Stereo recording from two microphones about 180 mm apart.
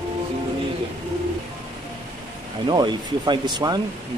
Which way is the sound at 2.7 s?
25° right (ahead or behind).